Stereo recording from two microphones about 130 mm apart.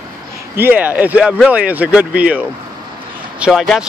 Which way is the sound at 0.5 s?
15° right (ahead or behind).